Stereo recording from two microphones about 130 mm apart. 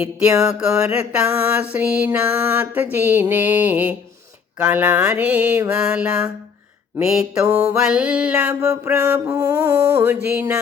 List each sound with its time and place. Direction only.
0.0 s mantra: 10° right (ahead or behind)
7.4 s music: 20° right (ahead or behind)
7.8 s mantra: 10° right (ahead or behind)
8.6 s mantra: 20° right (ahead or behind)